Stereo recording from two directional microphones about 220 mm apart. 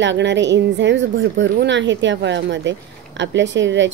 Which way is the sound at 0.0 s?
55° right (ahead or behind).